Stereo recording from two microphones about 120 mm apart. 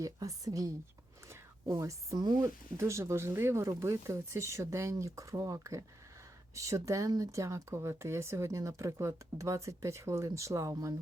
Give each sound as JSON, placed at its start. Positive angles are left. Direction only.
{"t": 0.0, "sound": "speech", "side_deg": -30}